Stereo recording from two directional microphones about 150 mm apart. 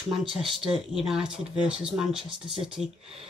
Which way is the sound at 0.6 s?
5° right (ahead or behind).